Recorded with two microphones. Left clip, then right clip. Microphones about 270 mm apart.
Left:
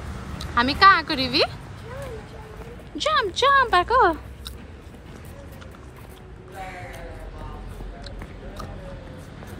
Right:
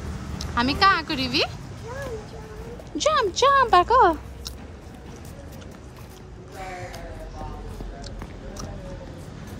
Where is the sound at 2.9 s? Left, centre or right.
Centre.